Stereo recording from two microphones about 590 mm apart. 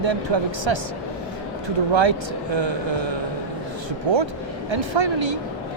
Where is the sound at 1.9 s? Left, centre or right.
Right.